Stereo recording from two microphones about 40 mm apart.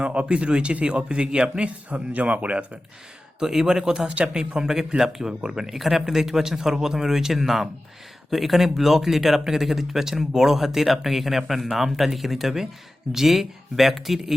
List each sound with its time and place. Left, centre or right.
0.0 s speech: right
1.9 s speech: right
3.4 s speech: centre